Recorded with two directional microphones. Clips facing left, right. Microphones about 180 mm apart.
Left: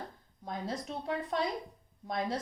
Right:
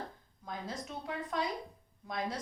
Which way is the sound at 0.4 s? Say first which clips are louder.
Left 4 dB; 30° left (ahead or behind).